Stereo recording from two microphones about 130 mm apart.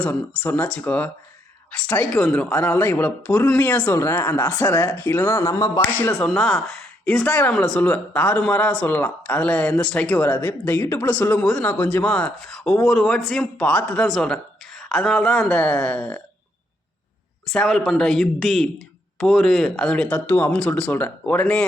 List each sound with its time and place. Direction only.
0.0 s speech: 15° left (ahead or behind)
6.1 s speech: 5° left (ahead or behind)
17.4 s speech: 5° left (ahead or behind)